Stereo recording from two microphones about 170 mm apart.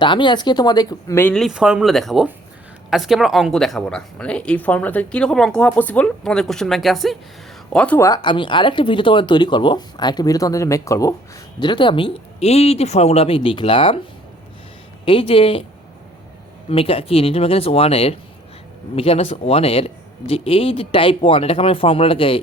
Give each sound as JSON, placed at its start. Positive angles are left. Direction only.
{"t": 0.0, "sound": "speech", "side_deg": 30}
{"t": 1.3, "sound": "speech", "side_deg": 0}
{"t": 15.0, "sound": "speech", "side_deg": 30}
{"t": 16.6, "sound": "speech", "side_deg": 35}